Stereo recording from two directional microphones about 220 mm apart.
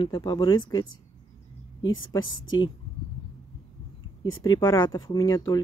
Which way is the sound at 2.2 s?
65° left (ahead or behind).